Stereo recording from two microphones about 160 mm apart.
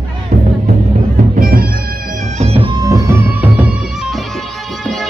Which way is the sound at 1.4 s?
65° right (ahead or behind).